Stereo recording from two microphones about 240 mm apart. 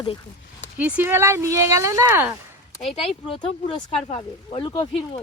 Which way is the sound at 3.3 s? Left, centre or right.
Left.